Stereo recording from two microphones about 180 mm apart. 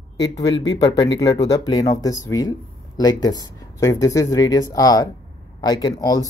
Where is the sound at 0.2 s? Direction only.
20° left (ahead or behind).